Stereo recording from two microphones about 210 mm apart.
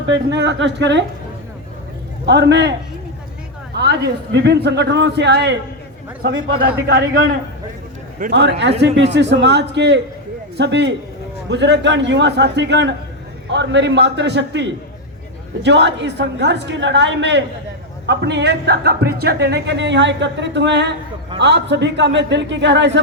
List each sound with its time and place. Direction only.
0.1 s speech: 55° right (ahead or behind)
2.2 s speech: 55° right (ahead or behind)
3.8 s speech: 50° right (ahead or behind)
8.3 s speech: 55° right (ahead or behind)